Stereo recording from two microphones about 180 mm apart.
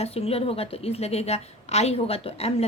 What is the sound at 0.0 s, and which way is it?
A woman's voice, 35° left (ahead or behind).